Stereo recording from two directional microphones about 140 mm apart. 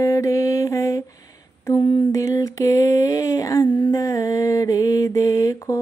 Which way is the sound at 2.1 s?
20° left (ahead or behind).